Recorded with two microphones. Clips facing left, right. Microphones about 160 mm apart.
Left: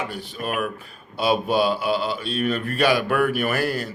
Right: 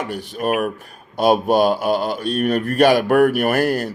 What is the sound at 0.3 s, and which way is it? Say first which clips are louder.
A man's voice: right 7 dB; 45° right (ahead or behind).